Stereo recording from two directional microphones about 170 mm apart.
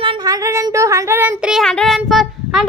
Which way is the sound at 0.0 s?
25° right (ahead or behind).